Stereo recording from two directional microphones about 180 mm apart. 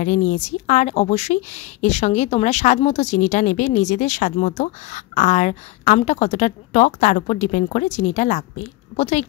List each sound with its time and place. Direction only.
0.0 s a woman's voice: 45° left (ahead or behind)